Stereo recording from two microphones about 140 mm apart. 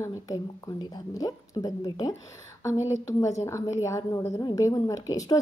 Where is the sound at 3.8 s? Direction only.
20° left (ahead or behind).